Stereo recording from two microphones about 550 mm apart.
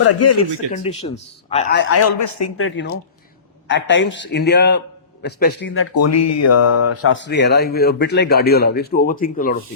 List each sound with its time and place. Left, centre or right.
0.0 s a man's voice: left
0.7 s a man's voice: centre